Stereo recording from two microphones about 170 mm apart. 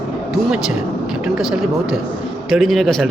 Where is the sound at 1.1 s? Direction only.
5° right (ahead or behind).